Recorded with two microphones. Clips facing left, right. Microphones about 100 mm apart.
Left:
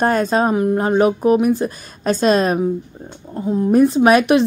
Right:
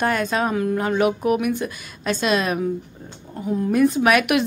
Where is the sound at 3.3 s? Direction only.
25° left (ahead or behind).